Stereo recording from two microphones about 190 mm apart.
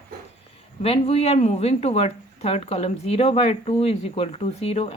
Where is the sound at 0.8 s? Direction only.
30° left (ahead or behind).